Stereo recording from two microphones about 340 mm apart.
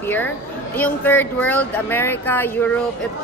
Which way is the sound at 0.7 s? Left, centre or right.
Centre.